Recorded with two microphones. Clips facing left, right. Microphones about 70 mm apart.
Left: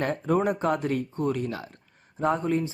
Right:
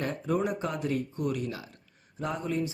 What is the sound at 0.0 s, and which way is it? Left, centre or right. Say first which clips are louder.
Speech: left 5 dB; left.